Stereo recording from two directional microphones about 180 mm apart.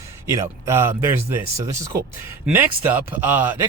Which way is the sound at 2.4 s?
10° right (ahead or behind).